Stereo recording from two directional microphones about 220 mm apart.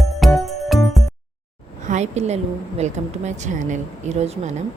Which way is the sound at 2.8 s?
30° right (ahead or behind).